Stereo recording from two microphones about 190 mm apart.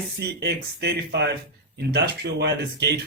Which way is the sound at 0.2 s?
60° right (ahead or behind).